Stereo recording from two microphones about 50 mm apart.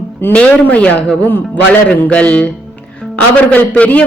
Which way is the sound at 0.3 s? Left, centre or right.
Left.